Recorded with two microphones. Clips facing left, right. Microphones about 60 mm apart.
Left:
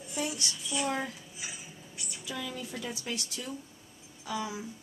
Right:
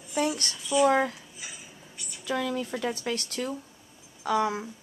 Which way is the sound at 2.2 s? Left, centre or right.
Right.